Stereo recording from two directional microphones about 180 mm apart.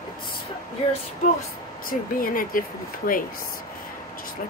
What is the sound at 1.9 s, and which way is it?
Speech, 50° left (ahead or behind).